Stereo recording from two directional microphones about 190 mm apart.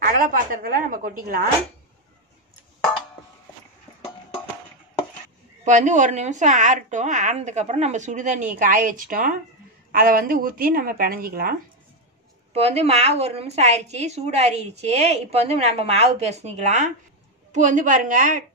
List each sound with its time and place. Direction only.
0.0 s a woman's voice: 45° right (ahead or behind)
5.6 s a woman's voice: 40° right (ahead or behind)
12.5 s a woman's voice: 30° right (ahead or behind)